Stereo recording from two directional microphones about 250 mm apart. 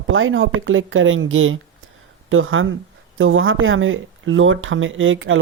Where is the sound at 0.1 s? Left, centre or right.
Right.